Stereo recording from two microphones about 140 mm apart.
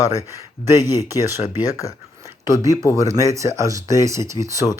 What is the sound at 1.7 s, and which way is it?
Speech, 25° left (ahead or behind).